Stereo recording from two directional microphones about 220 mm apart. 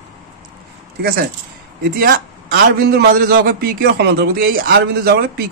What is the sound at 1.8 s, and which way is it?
A man's voice, 45° right (ahead or behind).